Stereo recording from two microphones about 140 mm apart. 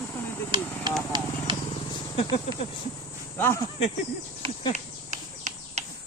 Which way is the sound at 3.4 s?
20° left (ahead or behind).